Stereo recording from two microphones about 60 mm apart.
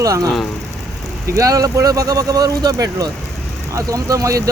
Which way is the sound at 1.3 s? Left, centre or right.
Right.